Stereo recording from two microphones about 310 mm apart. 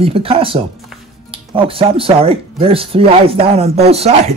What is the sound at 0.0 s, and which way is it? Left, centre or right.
A man's voice, centre.